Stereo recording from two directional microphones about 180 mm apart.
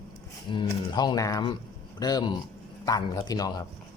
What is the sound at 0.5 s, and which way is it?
Speech, 25° left (ahead or behind).